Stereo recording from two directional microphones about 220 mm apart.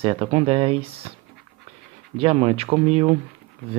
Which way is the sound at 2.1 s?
25° right (ahead or behind).